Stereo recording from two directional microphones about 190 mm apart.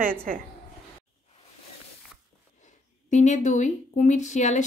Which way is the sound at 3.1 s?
40° left (ahead or behind).